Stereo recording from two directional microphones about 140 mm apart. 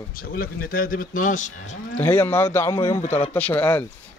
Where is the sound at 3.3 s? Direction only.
15° left (ahead or behind).